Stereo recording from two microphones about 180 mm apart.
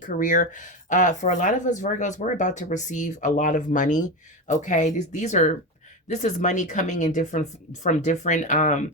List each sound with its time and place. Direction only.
0.0 s speech: 45° left (ahead or behind)